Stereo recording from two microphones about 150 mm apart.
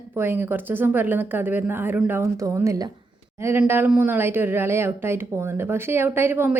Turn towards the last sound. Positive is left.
turn(degrees=-15)  # may be behind; listen again after turning